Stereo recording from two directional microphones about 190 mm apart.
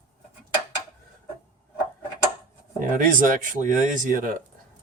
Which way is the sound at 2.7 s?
45° right (ahead or behind).